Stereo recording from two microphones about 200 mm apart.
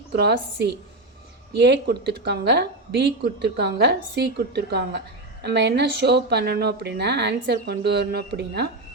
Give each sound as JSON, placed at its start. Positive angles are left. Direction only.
{"t": 0.1, "sound": "a woman's voice", "side_deg": -55}